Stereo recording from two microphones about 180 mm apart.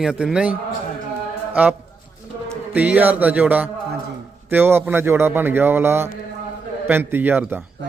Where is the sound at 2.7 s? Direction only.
10° right (ahead or behind).